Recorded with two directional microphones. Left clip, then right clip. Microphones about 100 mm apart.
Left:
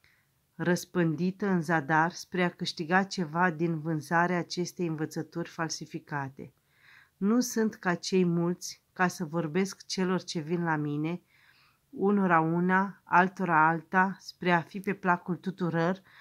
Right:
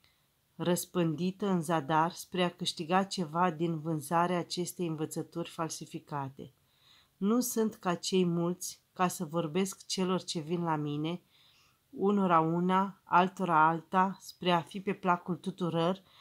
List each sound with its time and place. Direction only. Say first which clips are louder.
0.6 s speech: left 2 dB; 10° right (ahead or behind)
14.9 s speech: left 2 dB; 25° right (ahead or behind)
15.4 s speech: left 2 dB; 15° right (ahead or behind)